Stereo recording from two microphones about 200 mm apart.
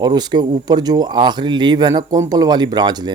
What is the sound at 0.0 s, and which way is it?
Speech, 20° right (ahead or behind).